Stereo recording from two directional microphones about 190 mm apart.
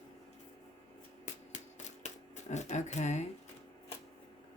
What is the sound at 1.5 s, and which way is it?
Typewriter, 35° left (ahead or behind).